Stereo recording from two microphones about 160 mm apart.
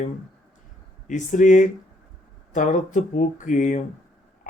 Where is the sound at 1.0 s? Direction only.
50° left (ahead or behind).